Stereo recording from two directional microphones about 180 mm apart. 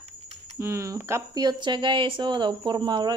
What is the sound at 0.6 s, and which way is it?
Speech, 15° right (ahead or behind).